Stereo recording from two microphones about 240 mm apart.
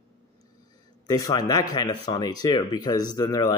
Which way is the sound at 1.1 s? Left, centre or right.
Centre.